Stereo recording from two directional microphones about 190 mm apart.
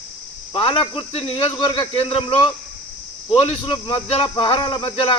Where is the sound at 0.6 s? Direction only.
25° left (ahead or behind).